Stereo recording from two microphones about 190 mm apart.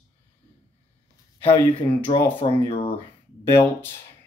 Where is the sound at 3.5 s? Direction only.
10° left (ahead or behind).